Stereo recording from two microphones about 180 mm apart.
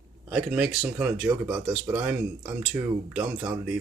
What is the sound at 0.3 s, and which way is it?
Speech, 5° right (ahead or behind).